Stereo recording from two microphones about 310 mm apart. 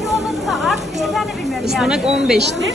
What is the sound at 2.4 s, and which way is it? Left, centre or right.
Speech, right.